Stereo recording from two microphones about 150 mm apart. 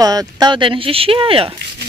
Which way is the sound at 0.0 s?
25° right (ahead or behind).